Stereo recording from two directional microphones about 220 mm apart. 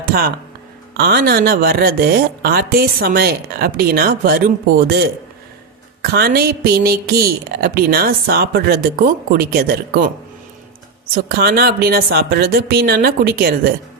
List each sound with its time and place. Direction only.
0.0 s speech: 45° right (ahead or behind)
6.0 s speech: 45° right (ahead or behind)
11.1 s speech: 45° right (ahead or behind)